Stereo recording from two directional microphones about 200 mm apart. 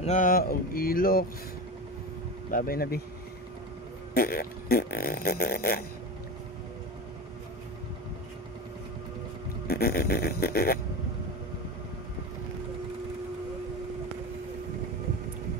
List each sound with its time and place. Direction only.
0.0 s speech: 40° left (ahead or behind)
2.5 s speech: 45° left (ahead or behind)
4.1 s speech: 45° left (ahead or behind)
9.7 s speech: 50° left (ahead or behind)